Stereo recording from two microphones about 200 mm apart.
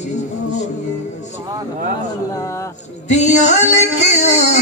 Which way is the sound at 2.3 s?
15° left (ahead or behind).